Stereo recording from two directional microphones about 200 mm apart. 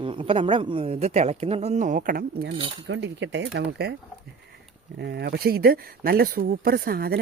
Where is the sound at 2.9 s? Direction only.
60° right (ahead or behind).